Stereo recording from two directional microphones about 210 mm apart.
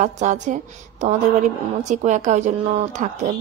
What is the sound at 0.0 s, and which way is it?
Speech, 35° right (ahead or behind).